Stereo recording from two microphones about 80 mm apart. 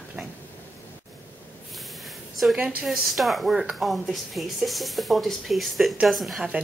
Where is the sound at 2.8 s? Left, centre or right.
Centre.